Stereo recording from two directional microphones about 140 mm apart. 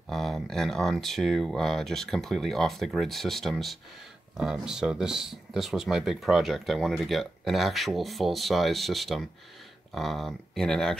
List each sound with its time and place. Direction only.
0.1 s speech: centre (ahead or behind)